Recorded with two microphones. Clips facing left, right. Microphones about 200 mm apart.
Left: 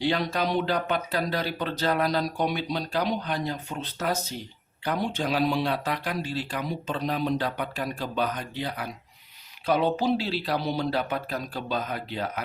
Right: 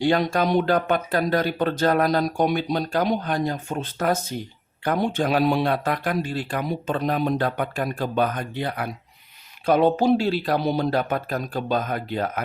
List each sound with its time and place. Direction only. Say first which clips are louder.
0.0 s speech: right 5 dB; 50° right (ahead or behind)